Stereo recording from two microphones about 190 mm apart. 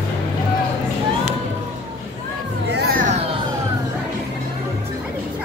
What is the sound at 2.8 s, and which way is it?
Children playing, 45° right (ahead or behind).